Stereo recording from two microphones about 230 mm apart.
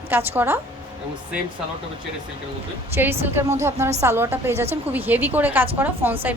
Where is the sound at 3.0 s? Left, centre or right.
Centre.